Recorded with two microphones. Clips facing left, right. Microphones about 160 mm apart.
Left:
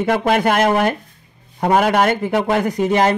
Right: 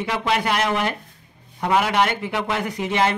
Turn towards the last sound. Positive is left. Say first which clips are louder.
# left 6 dB
turn(degrees=40)  # may be behind; listen again after turning